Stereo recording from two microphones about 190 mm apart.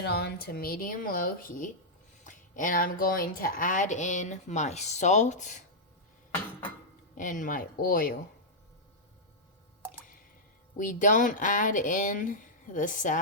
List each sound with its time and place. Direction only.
0.0 s speech: 60° left (ahead or behind); by 5.6 s 40° left (ahead or behind)
7.2 s speech: 45° left (ahead or behind)
10.8 s speech: 45° left (ahead or behind)